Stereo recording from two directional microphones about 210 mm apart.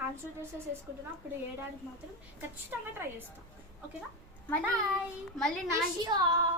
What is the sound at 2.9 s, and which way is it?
Speech, 10° right (ahead or behind).